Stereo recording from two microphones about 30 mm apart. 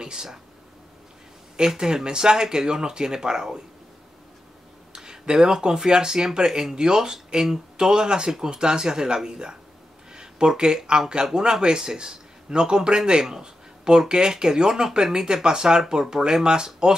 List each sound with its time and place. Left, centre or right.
0.0 s speech: right
1.9 s speech: right
4.9 s a sound: right
5.9 s speech: right